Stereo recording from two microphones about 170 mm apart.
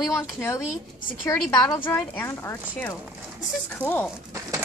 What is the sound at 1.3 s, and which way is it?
A woman's voice, 20° left (ahead or behind).